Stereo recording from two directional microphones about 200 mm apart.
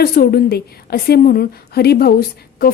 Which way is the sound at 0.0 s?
50° left (ahead or behind).